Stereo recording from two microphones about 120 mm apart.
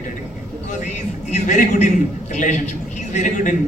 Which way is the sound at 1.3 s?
90° left.